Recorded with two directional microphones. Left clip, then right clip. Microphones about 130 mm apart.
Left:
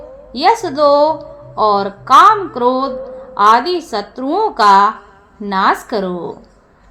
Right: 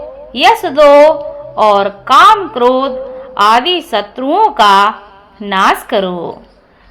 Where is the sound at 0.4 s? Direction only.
55° right (ahead or behind).